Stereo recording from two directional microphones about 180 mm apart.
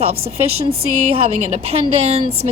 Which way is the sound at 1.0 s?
35° right (ahead or behind).